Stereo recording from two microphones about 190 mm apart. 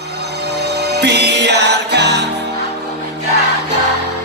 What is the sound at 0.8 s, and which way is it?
Music, 60° right (ahead or behind).